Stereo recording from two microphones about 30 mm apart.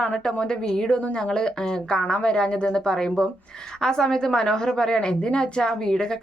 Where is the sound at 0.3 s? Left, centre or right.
Left.